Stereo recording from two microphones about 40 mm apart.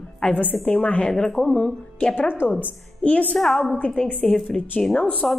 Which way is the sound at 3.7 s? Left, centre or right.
Left.